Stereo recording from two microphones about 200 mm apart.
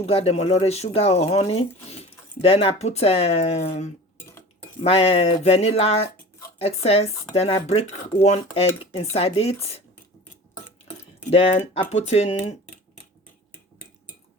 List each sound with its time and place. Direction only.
0.0 s speech: 30° left (ahead or behind)
11.3 s speech: 30° left (ahead or behind)